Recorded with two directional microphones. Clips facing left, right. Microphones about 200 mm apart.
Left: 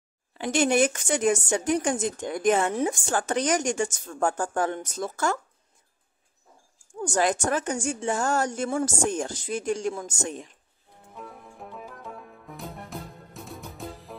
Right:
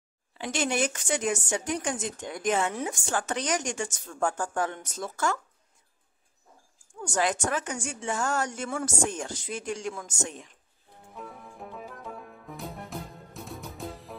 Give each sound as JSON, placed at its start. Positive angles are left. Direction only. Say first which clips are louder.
{"t": 0.4, "sound": "a woman's voice", "louder": "left 6 dB", "side_deg": 50}
{"t": 7.2, "sound": "a woman's voice", "louder": "left 3 dB", "side_deg": 45}
{"t": 11.1, "sound": "music", "louder": "even", "side_deg": 0}